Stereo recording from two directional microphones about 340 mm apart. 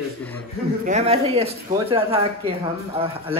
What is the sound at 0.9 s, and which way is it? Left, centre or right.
Speech, centre.